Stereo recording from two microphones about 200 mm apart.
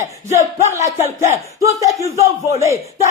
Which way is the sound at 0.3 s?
15° right (ahead or behind).